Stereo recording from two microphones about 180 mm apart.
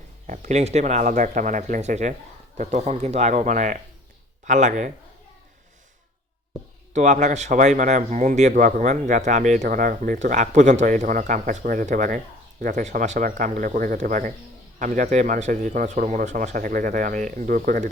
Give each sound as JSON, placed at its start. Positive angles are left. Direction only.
{"t": 0.3, "sound": "speech", "side_deg": -40}
{"t": 6.9, "sound": "speech", "side_deg": -40}